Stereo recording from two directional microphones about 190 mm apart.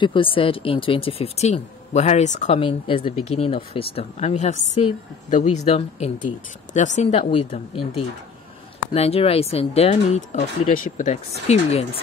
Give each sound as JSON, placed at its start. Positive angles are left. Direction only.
{"t": 0.0, "sound": "speech", "side_deg": 25}